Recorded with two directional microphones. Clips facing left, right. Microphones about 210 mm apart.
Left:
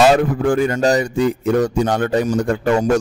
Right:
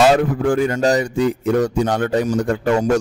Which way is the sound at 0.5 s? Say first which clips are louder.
Left 1 dB; 45° left (ahead or behind).